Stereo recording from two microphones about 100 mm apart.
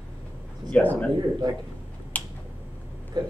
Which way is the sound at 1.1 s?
40° right (ahead or behind).